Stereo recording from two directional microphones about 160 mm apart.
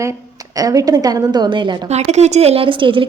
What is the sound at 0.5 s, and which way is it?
A woman's voice, 20° right (ahead or behind).